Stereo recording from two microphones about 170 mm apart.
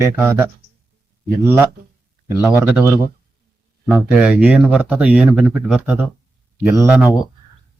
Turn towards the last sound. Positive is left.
turn(degrees=-10)  # may be behind; listen again after turning